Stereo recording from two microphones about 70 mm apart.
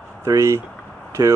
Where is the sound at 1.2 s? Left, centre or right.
Right.